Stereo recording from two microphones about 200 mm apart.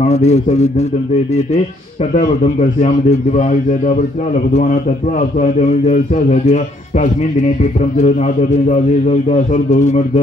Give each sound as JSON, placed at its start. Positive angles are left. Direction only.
{"t": 0.0, "sound": "a man's voice", "side_deg": 35}
{"t": 2.8, "sound": "a man's voice", "side_deg": 35}
{"t": 5.4, "sound": "a man's voice", "side_deg": 35}